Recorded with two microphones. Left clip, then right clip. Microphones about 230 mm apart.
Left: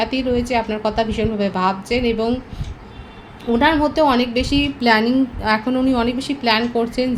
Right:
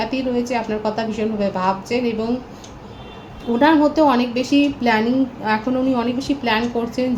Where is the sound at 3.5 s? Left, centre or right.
Left.